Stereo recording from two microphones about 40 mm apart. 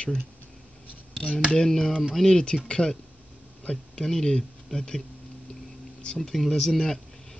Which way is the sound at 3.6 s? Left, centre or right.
Left.